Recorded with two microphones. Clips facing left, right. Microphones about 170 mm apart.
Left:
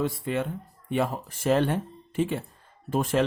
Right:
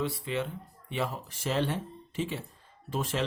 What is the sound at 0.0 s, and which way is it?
Speech, 45° left (ahead or behind).